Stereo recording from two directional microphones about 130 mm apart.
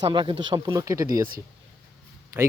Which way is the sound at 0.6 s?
25° right (ahead or behind).